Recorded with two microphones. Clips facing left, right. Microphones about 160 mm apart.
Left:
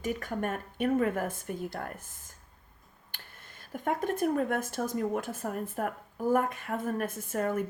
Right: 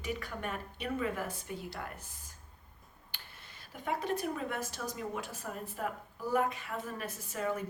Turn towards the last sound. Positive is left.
turn(degrees=50)  # may be behind; listen again after turning